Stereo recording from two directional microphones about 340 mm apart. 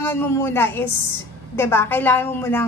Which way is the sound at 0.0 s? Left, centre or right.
Centre.